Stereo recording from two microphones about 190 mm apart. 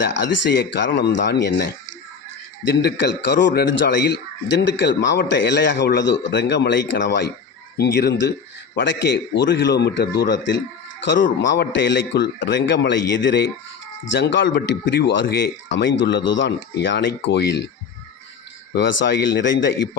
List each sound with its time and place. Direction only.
0.1 s a man's voice: 70° left (ahead or behind)
18.7 s a man's voice: 75° left (ahead or behind)